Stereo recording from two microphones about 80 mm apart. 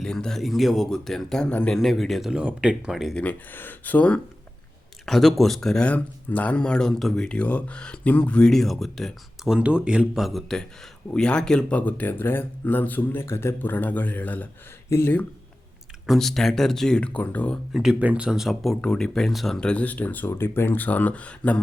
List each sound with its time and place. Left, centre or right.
0.0 s speech: centre
2.3 s speech: centre
2.9 s speech: centre
3.2 s speech: left
5.0 s speech: centre
9.5 s speech: centre; by 14.4 s left
14.8 s speech: left
16.0 s speech: centre
17.7 s speech: centre
18.0 s speech: centre
18.8 s speech: centre